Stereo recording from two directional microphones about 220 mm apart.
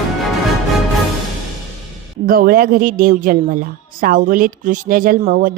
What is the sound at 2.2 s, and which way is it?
A woman's voice, 40° right (ahead or behind).